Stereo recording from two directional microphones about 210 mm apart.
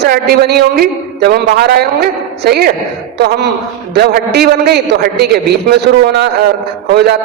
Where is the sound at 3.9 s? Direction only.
50° right (ahead or behind).